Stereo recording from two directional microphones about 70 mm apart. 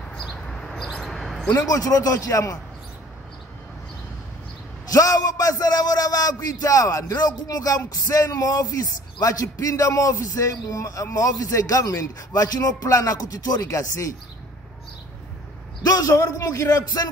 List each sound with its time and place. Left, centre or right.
0.5 s a sound: centre
1.7 s a man's voice: left
4.8 s a man's voice: left
13.7 s speech: left
15.8 s a man's voice: left
16.2 s speech: left